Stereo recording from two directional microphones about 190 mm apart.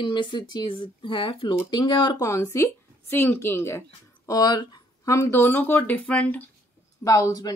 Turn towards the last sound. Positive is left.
turn(degrees=20)  # may be behind; listen again after turning